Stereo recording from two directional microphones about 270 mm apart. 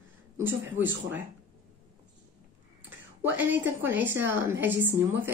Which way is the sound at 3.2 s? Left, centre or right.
Centre.